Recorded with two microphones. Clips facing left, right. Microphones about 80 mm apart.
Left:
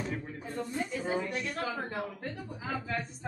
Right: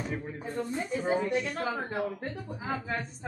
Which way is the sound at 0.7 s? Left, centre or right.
Right.